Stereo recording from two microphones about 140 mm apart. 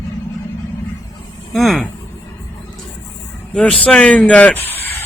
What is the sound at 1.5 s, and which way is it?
Speech, centre (ahead or behind).